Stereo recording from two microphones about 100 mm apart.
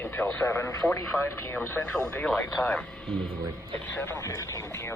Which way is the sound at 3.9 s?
20° left (ahead or behind).